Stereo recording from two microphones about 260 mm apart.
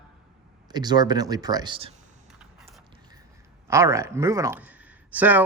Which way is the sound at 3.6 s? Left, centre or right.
Centre.